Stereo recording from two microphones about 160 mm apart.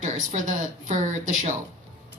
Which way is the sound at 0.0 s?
55° right (ahead or behind).